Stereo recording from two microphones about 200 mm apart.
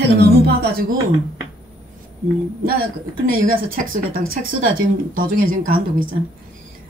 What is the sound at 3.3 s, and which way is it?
A woman's voice, 45° right (ahead or behind).